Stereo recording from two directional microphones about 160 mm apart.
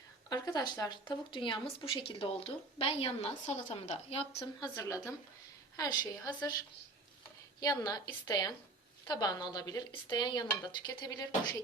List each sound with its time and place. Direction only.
0.3 s a woman's voice: 25° left (ahead or behind)
4.7 s speech: 20° left (ahead or behind)
7.6 s speech: 25° left (ahead or behind)